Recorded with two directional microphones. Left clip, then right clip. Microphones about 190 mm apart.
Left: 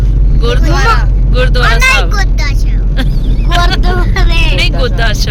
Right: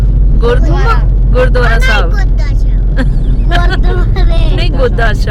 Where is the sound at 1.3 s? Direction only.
40° right (ahead or behind).